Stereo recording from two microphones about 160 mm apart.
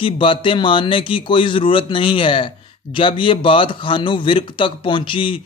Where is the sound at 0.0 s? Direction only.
30° left (ahead or behind).